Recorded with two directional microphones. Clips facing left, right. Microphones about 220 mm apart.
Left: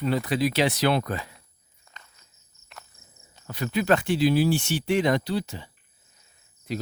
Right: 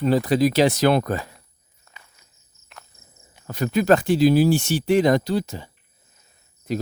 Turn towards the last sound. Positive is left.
turn(degrees=-45)  # may be behind; listen again after turning